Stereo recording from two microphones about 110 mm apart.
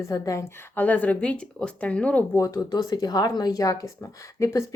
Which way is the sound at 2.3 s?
30° left (ahead or behind).